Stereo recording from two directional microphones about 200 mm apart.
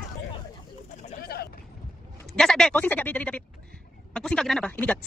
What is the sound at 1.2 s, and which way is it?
Speech, 55° left (ahead or behind).